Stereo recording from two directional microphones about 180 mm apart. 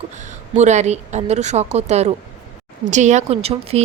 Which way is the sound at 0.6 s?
40° right (ahead or behind).